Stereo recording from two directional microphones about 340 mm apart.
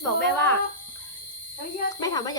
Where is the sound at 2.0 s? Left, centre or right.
Centre.